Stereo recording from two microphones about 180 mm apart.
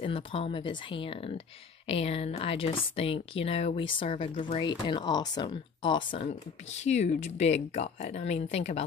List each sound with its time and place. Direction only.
0.0 s speech: 30° left (ahead or behind)
6.8 s speech: 40° left (ahead or behind)